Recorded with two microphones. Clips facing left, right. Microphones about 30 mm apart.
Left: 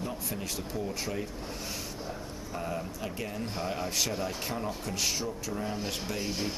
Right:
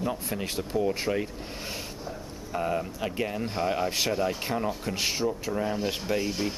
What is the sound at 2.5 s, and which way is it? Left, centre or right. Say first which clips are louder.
Speech: right 7 dB; right.